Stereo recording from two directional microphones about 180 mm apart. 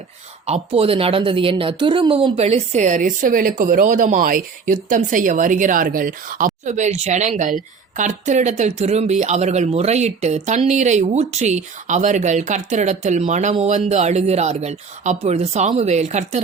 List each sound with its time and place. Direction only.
0.4 s a woman's voice: 35° right (ahead or behind)